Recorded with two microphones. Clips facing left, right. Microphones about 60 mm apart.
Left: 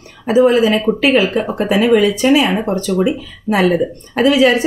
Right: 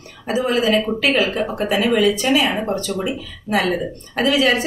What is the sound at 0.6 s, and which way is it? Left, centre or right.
A woman's voice, left.